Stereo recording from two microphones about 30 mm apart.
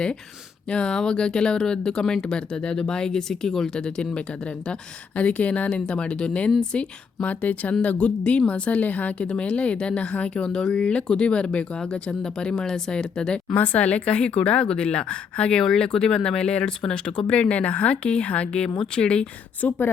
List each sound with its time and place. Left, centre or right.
0.7 s speech: left; by 3.7 s centre
3.8 s speech: left
5.1 s a woman's voice: left
5.9 s a woman's voice: left
7.4 s a woman's voice: left
9.2 s a woman's voice: left
10.4 s speech: left
10.8 s speech: left
13.7 s a woman's voice: left
16.9 s a woman's voice: left
19.6 s a woman's voice: left